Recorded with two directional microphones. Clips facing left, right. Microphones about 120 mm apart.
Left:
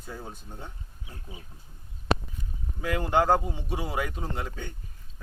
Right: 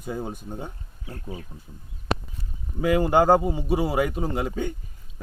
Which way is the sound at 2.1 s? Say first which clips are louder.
Left 1 dB; 30° left (ahead or behind).